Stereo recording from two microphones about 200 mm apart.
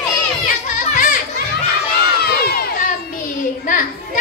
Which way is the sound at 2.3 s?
50° left (ahead or behind).